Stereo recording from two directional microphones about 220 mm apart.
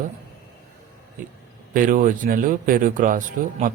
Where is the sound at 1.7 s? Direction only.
35° right (ahead or behind).